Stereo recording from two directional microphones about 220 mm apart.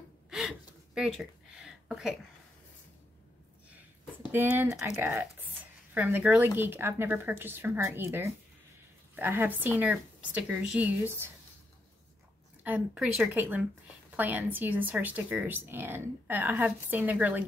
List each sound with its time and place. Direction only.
0.3 s gasp: centre (ahead or behind)
4.3 s speech: 10° right (ahead or behind)
12.6 s speech: 5° right (ahead or behind)